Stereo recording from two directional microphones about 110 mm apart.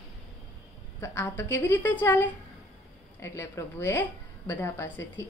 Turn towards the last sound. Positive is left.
turn(degrees=25)  # may be behind; listen again after turning